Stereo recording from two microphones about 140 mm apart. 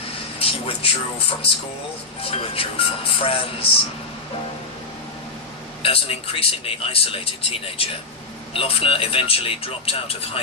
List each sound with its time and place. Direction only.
0.3 s speech: 40° left (ahead or behind)
5.8 s speech: 40° left (ahead or behind)